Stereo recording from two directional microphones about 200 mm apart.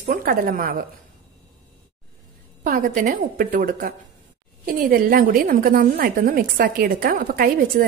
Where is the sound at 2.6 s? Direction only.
45° right (ahead or behind).